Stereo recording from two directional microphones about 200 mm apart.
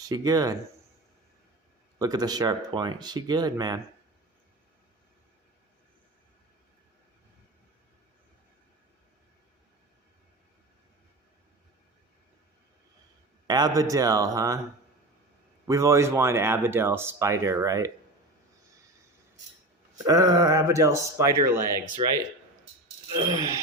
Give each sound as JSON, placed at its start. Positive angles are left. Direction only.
{"t": 0.1, "sound": "speech", "side_deg": -20}
{"t": 2.0, "sound": "speech", "side_deg": -20}
{"t": 13.5, "sound": "speech", "side_deg": -20}
{"t": 15.6, "sound": "speech", "side_deg": -15}
{"t": 20.1, "sound": "speech", "side_deg": -15}